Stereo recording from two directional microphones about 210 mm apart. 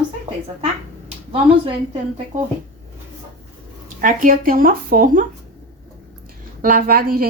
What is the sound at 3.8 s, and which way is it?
Speech, 40° right (ahead or behind).